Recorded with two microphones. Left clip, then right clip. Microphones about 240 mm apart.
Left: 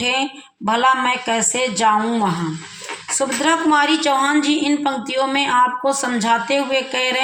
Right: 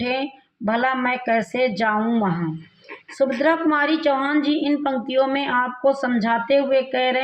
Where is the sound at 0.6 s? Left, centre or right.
Left.